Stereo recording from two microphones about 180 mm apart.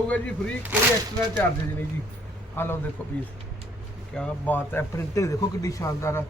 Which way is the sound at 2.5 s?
10° left (ahead or behind).